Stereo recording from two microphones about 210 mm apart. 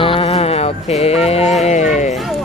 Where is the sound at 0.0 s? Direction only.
25° left (ahead or behind).